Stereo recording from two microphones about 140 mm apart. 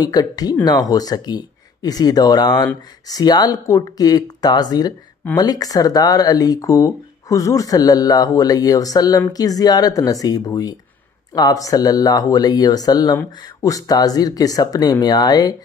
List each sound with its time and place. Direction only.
0.0 s speech: 30° left (ahead or behind)